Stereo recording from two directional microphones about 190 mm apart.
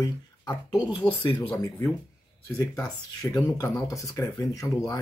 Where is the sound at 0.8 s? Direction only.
25° left (ahead or behind).